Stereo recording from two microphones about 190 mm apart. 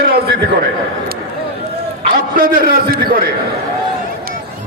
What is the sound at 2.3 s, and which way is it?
Speech, 50° right (ahead or behind).